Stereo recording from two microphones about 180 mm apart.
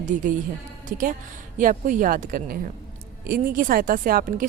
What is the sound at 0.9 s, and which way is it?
Speech, 50° right (ahead or behind).